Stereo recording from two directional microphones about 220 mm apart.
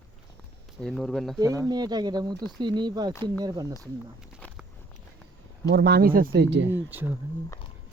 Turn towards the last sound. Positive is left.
turn(degrees=-10)  # may be behind; listen again after turning